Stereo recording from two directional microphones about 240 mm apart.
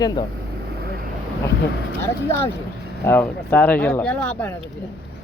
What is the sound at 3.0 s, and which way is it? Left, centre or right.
Speech, centre.